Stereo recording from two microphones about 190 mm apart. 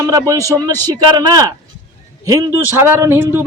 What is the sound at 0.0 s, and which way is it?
A man's voice, 20° right (ahead or behind).